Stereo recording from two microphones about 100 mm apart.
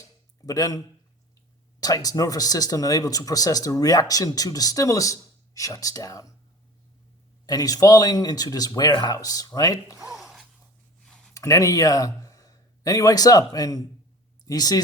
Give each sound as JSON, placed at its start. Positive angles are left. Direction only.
{"t": 0.4, "sound": "speech", "side_deg": 35}
{"t": 7.4, "sound": "speech", "side_deg": 40}
{"t": 10.1, "sound": "gasp", "side_deg": -5}
{"t": 11.3, "sound": "speech", "side_deg": 35}